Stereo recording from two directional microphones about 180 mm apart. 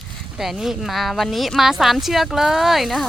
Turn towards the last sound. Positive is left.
turn(degrees=0)  # may be behind; listen again after turning